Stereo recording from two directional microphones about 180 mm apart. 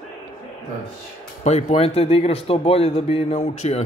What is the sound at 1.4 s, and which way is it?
Speech, 40° left (ahead or behind).